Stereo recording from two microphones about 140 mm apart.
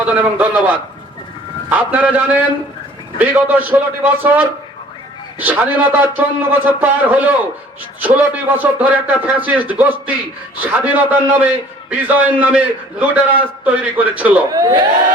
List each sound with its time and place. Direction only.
0.0 s a man's voice: 10° right (ahead or behind)
14.5 s speech: 25° right (ahead or behind)